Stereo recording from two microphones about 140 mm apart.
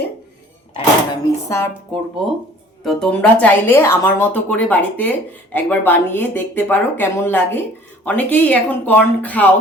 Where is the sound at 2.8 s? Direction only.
5° left (ahead or behind).